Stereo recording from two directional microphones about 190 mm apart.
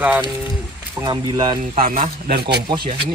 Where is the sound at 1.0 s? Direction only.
25° right (ahead or behind).